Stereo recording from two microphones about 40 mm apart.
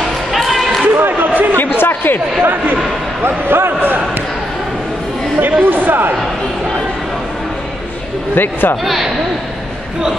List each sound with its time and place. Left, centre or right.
0.3 s a sound: centre
0.9 s a sound: right
1.8 s chatter: left
2.4 s a man's voice: right
3.3 s a man's voice: right
5.4 s speech: right
8.4 s speech: left
8.8 s a man's voice: centre